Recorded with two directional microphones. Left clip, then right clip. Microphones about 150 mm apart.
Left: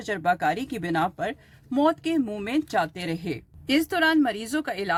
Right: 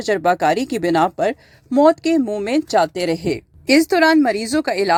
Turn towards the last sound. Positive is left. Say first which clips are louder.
# right 10 dB
turn(degrees=-50)  # may be behind; listen again after turning